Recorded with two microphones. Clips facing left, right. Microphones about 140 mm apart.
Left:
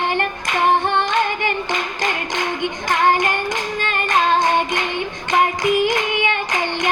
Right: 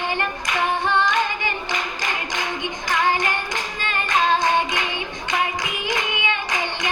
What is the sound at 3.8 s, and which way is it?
Singing, 50° left (ahead or behind).